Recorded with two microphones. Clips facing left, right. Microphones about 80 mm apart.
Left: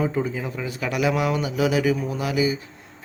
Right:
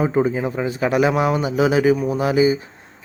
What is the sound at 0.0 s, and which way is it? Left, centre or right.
Speech, right.